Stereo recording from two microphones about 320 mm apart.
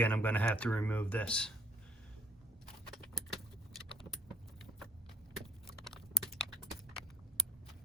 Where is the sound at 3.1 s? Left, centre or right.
Centre.